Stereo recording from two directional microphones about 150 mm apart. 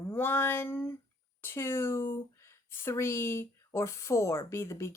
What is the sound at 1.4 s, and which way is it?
A woman's voice, 15° left (ahead or behind).